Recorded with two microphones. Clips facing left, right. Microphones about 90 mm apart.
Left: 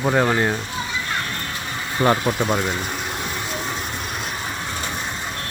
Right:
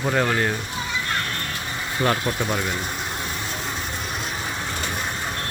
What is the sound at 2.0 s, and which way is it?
Speech, 25° left (ahead or behind).